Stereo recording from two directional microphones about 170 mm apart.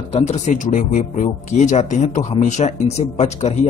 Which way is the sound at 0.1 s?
40° left (ahead or behind).